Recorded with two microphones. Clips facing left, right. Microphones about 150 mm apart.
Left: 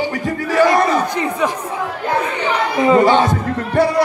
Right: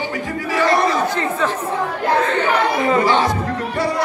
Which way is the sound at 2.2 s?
15° left (ahead or behind).